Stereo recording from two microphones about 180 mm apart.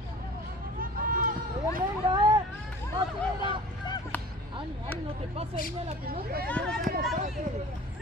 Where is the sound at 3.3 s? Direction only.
25° left (ahead or behind).